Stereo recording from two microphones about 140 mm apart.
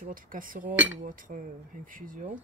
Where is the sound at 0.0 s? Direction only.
75° right (ahead or behind).